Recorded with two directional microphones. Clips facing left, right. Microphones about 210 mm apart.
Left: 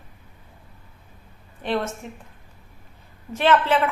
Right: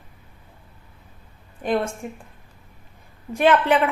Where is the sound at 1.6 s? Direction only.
10° right (ahead or behind).